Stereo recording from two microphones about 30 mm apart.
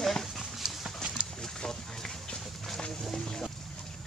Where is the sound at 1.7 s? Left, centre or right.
Left.